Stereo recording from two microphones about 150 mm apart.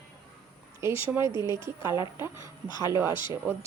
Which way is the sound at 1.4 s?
20° right (ahead or behind).